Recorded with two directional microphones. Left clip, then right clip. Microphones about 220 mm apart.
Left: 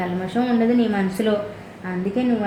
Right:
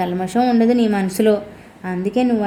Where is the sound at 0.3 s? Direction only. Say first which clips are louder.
Right 4 dB; 50° right (ahead or behind).